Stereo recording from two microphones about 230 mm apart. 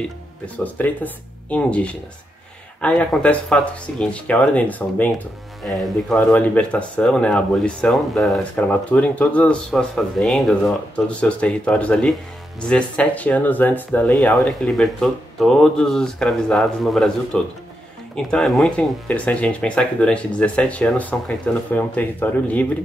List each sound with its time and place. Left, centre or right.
0.7 s speech: centre